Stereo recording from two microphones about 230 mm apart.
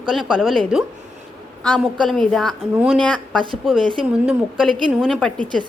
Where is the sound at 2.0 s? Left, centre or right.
Centre.